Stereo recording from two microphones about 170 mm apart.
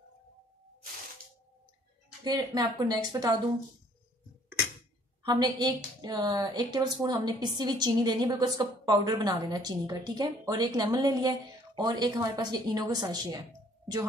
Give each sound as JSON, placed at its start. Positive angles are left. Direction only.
{"t": 2.2, "sound": "a woman's voice", "side_deg": -25}
{"t": 5.2, "sound": "a woman's voice", "side_deg": -25}